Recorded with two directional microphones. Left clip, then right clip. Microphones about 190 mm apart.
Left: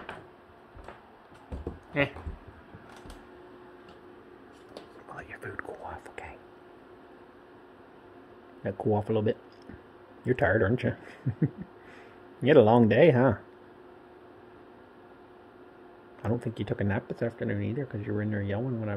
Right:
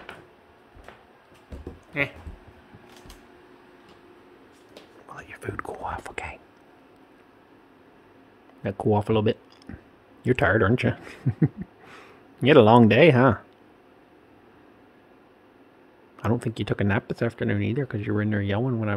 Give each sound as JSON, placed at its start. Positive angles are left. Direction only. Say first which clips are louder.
{"t": 1.9, "sound": "speech", "louder": "right 1 dB", "side_deg": 5}
{"t": 5.1, "sound": "a sound", "louder": "right 4 dB", "side_deg": -20}
{"t": 5.7, "sound": "speech", "louder": "right 8 dB", "side_deg": -40}
{"t": 8.6, "sound": "speech", "louder": "right 5 dB", "side_deg": -30}
{"t": 16.2, "sound": "speech", "louder": "right 5 dB", "side_deg": -35}